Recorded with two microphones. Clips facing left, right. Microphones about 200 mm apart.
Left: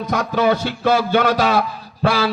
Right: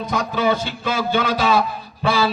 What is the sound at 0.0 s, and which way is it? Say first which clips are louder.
A man's voice: left 3 dB; 70° left (ahead or behind).